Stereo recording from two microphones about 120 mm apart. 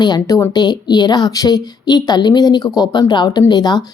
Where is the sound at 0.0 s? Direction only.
35° left (ahead or behind).